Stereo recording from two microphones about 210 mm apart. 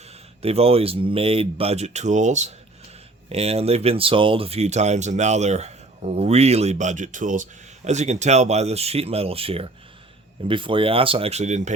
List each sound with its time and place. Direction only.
0.4 s speech: 30° right (ahead or behind)